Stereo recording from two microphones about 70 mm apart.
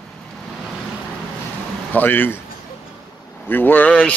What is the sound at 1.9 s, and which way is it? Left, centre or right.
Speech, left.